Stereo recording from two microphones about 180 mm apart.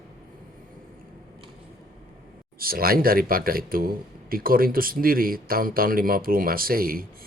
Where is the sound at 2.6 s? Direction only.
55° right (ahead or behind).